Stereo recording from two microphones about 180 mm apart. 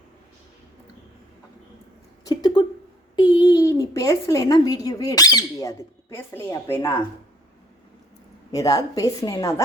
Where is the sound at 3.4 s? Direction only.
20° left (ahead or behind).